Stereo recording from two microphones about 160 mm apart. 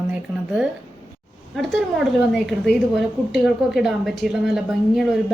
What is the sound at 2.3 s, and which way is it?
A woman's voice, centre (ahead or behind).